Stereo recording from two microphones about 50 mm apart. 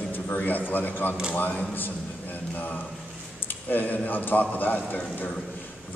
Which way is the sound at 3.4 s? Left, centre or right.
Left.